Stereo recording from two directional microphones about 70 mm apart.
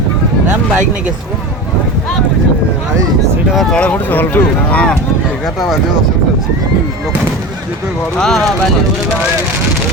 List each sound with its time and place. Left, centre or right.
3.5 s speech: centre
3.8 s speech: left
8.2 s speech: centre